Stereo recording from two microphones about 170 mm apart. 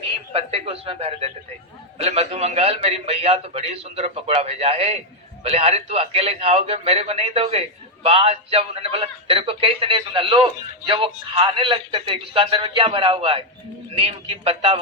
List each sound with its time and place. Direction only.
0.3 s a man's voice: 35° right (ahead or behind)